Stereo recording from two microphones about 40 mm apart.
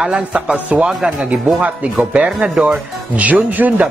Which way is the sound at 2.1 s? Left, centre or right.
Right.